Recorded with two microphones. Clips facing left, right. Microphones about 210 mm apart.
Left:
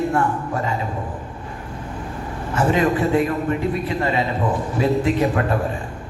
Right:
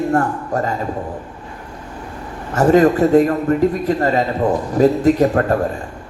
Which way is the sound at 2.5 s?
40° right (ahead or behind).